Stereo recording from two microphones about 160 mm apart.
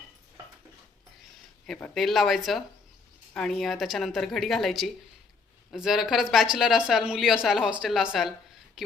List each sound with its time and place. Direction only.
1.6 s speech: 5° left (ahead or behind)